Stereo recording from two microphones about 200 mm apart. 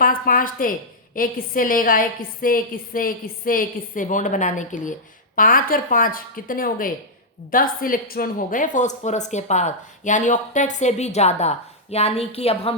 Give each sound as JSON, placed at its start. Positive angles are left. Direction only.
{"t": 0.0, "sound": "a woman's voice", "side_deg": 45}